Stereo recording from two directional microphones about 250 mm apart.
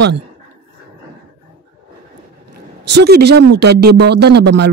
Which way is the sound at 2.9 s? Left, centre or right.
Right.